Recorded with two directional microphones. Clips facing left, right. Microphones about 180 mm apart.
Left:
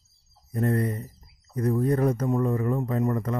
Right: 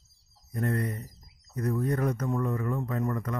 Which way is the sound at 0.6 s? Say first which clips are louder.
Left 5 dB; 20° left (ahead or behind).